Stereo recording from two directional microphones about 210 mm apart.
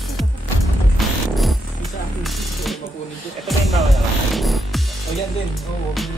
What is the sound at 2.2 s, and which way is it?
Music, centre (ahead or behind).